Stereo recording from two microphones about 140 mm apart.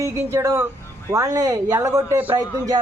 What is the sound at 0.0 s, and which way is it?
A man's voice, 20° right (ahead or behind).